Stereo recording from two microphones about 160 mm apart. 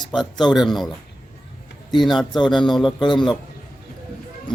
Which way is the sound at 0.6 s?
Centre (ahead or behind).